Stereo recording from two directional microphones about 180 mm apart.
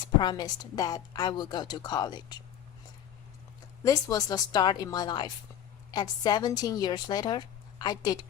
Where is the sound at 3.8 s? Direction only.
20° left (ahead or behind).